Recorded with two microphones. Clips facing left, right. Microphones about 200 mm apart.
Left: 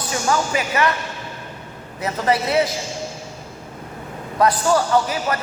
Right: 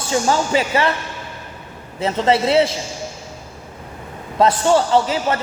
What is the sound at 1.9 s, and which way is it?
Speech, 25° right (ahead or behind).